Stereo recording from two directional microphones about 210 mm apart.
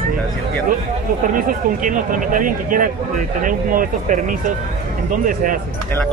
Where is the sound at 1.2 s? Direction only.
40° right (ahead or behind).